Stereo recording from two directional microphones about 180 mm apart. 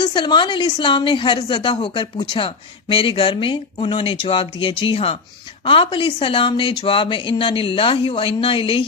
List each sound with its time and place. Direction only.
0.0 s a woman's voice: 25° left (ahead or behind)